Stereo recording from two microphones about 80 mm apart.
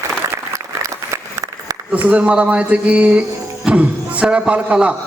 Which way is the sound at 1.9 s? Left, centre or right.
Centre.